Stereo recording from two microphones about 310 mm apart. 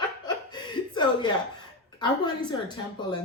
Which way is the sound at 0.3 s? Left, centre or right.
Centre.